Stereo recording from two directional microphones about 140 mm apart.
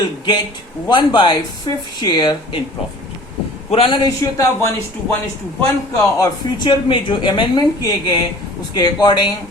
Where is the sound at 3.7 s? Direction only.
40° left (ahead or behind).